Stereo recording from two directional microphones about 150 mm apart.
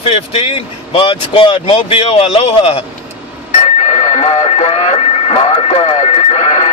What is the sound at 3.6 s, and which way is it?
Radio, 50° left (ahead or behind).